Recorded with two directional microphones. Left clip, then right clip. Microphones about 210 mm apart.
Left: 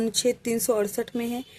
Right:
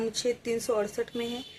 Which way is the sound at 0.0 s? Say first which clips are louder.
Left 5 dB; 50° left (ahead or behind).